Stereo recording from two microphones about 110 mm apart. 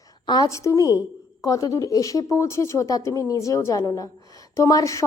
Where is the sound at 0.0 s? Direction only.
35° left (ahead or behind).